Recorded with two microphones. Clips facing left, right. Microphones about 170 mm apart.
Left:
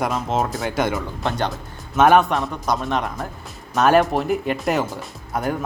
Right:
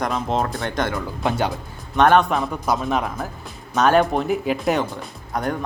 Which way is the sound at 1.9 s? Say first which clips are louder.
Left 1 dB; 5° left (ahead or behind).